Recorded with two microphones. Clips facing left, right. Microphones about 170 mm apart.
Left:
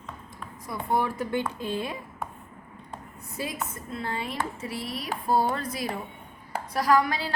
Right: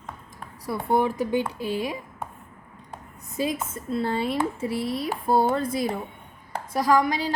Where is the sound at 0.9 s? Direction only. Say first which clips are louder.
Right 4 dB; 20° right (ahead or behind).